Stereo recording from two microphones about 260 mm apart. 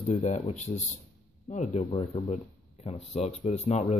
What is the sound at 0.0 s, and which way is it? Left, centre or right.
Speech, left.